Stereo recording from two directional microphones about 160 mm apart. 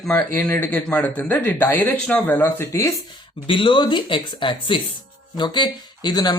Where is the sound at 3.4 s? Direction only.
30° left (ahead or behind).